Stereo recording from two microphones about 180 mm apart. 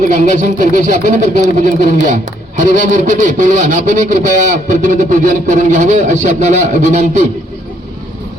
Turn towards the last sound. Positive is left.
turn(degrees=-40)  # may be behind; listen again after turning